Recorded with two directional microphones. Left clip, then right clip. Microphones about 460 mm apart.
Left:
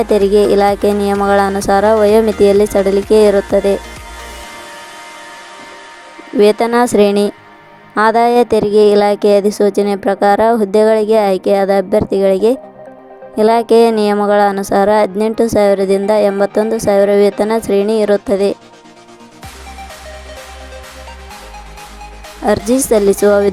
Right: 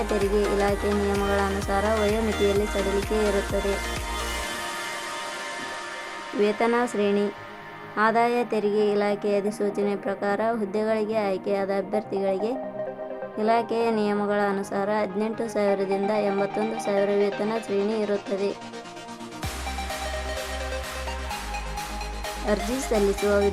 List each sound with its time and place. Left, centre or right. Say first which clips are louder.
0.3 s speech: left 13 dB; centre
6.4 s speech: left 13 dB; centre
22.4 s speech: left 14 dB; centre